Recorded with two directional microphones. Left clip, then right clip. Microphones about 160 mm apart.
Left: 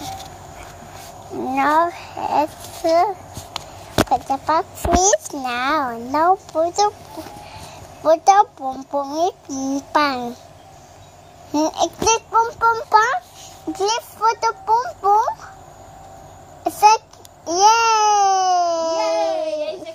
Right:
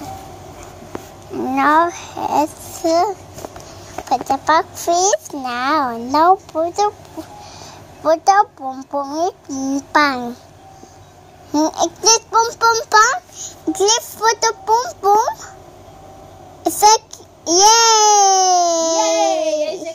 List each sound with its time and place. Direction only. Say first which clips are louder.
1.3 s a child's voice: right 3 dB; 5° right (ahead or behind)
8.0 s a child's voice: even; centre (ahead or behind)
11.5 s a child's voice: right 2 dB; 10° right (ahead or behind)
12.9 s a child's voice: right 3 dB; centre (ahead or behind)
16.6 s a child's voice: right 1 dB; 15° right (ahead or behind)